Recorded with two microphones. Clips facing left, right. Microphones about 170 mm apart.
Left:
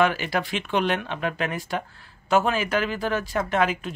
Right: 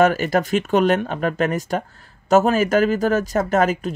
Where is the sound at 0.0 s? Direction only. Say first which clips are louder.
Right 6 dB; 45° right (ahead or behind).